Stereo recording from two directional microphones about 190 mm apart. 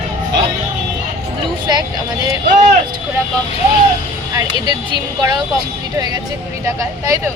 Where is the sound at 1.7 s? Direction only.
20° right (ahead or behind).